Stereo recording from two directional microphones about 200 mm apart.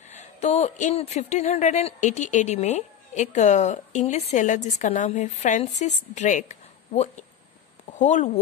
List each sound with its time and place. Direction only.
0.1 s speech: 35° left (ahead or behind)